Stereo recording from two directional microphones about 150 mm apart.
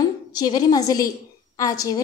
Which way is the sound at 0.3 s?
25° left (ahead or behind).